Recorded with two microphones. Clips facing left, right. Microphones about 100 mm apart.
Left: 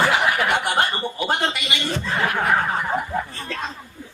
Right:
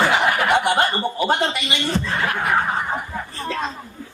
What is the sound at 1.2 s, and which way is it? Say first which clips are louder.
Speech: right 2 dB; 35° right (ahead or behind).